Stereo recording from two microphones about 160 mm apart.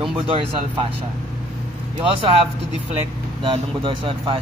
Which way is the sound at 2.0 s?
35° right (ahead or behind).